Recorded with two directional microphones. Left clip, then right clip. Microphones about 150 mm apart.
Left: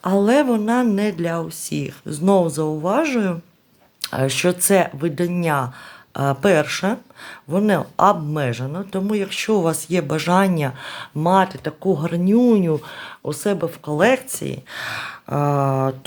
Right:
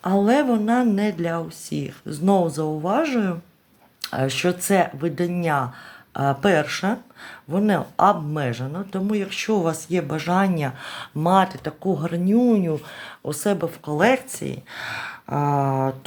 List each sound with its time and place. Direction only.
0.0 s speech: 30° left (ahead or behind)
11.8 s speech: 35° left (ahead or behind)